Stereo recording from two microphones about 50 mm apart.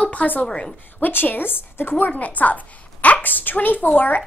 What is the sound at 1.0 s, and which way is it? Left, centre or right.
A woman's voice, left.